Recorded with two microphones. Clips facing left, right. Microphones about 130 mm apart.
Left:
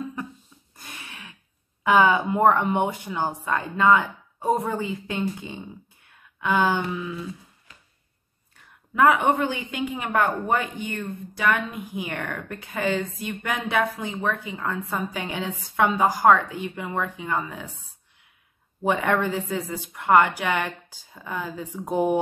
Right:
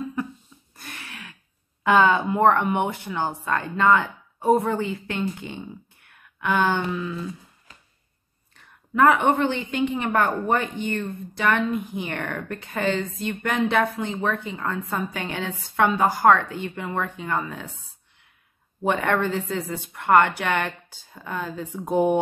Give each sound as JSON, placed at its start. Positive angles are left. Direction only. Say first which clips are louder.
{"t": 0.7, "sound": "a sound", "louder": "right 2 dB", "side_deg": 20}
{"t": 1.8, "sound": "speech", "louder": "even", "side_deg": 10}
{"t": 8.9, "sound": "speech", "louder": "right 1 dB", "side_deg": 5}
{"t": 18.9, "sound": "speech", "louder": "even", "side_deg": 10}